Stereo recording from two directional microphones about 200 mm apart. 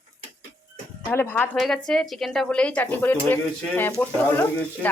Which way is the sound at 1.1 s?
10° left (ahead or behind).